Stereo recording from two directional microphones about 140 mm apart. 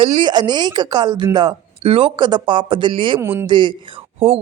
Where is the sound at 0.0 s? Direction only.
35° right (ahead or behind).